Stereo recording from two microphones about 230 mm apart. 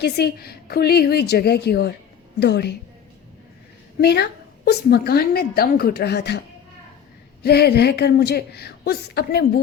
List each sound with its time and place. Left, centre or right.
0.0 s a woman's voice: left
4.0 s a woman's voice: left
7.4 s a woman's voice: left